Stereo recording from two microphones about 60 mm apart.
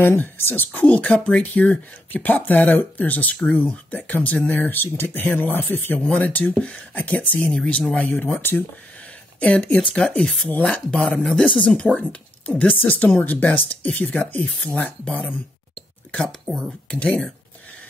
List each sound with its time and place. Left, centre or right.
0.4 s a woman's voice: left
0.7 s speech: left
6.6 s speech: centre
7.9 s a woman's voice: left
9.4 s speech: left
15.0 s speech: centre
16.3 s speech: centre
16.8 s speech: centre